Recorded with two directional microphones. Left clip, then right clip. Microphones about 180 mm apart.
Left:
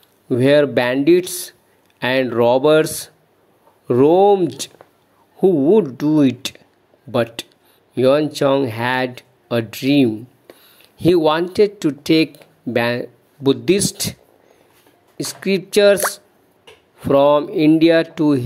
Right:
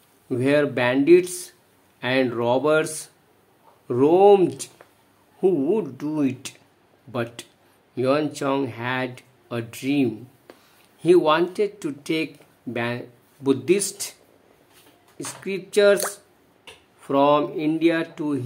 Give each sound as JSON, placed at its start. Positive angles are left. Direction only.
{"t": 0.3, "sound": "speech", "side_deg": 35}
{"t": 15.1, "sound": "speech", "side_deg": 35}
{"t": 17.1, "sound": "speech", "side_deg": 35}